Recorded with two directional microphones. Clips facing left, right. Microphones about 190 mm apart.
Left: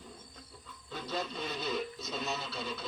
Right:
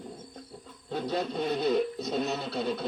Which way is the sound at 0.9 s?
60° right (ahead or behind).